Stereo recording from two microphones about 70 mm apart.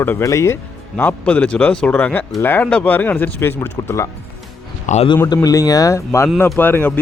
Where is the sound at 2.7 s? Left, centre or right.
Centre; by 4.0 s left.